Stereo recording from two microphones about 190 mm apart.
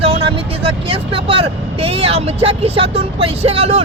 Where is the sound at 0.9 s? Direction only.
30° right (ahead or behind).